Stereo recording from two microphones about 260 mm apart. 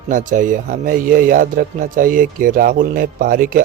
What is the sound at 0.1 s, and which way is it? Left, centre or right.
A man's voice, right.